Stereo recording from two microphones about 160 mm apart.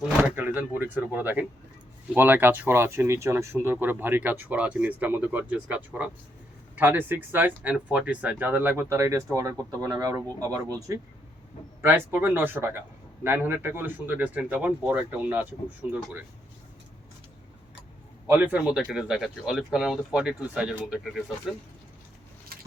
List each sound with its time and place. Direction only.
0.2 s speech: 10° right (ahead or behind)
18.3 s speech: 10° right (ahead or behind)
22.5 s vehicle: 65° right (ahead or behind)